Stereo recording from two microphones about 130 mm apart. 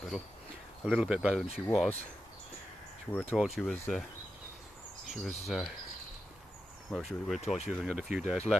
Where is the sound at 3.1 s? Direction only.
15° left (ahead or behind).